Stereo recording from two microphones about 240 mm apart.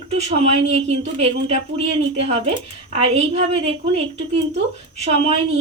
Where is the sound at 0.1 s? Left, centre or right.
Right.